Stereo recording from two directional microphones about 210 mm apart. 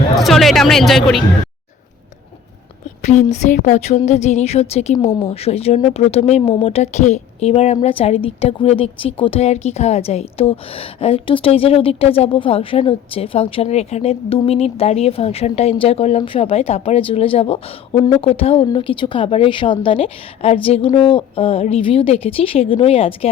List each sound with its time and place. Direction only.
0.2 s music: centre (ahead or behind)
3.0 s a woman's voice: 35° left (ahead or behind)